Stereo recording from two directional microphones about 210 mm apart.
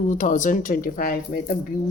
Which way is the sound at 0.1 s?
35° left (ahead or behind).